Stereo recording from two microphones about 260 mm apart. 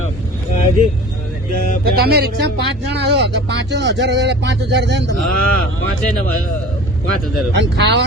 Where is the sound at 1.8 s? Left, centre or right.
Right.